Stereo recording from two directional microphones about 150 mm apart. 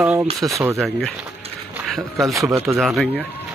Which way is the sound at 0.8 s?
Centre (ahead or behind).